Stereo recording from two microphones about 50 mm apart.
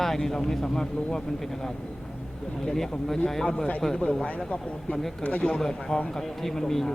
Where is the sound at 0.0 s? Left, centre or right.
Centre.